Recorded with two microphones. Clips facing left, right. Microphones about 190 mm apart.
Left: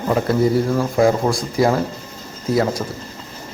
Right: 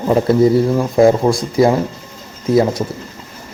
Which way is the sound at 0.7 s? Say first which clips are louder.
Right 4 dB; 25° right (ahead or behind).